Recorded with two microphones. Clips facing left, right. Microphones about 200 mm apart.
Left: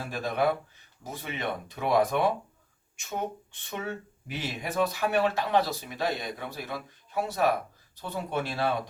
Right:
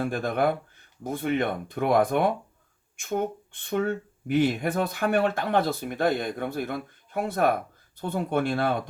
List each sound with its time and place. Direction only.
0.0 s speech: 55° right (ahead or behind)